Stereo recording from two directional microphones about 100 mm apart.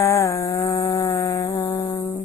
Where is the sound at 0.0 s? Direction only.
30° left (ahead or behind).